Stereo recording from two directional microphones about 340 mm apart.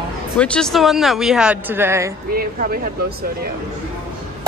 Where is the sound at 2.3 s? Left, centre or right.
Right.